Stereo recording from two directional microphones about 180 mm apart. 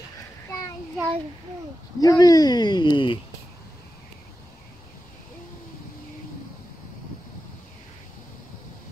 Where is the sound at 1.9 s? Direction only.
20° left (ahead or behind).